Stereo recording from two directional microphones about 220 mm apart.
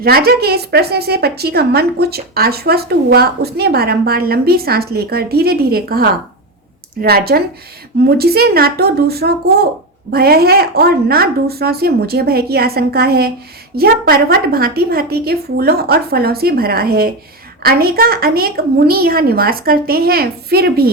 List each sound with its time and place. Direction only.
0.0 s speech: 45° right (ahead or behind)